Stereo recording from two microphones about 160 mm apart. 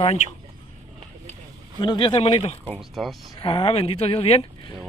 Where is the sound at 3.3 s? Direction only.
35° left (ahead or behind).